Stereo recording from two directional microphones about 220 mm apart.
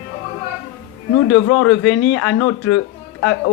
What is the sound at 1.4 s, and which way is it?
Speech, 90° left.